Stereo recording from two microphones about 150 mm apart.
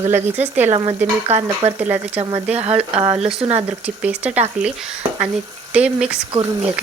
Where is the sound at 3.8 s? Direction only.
10° right (ahead or behind).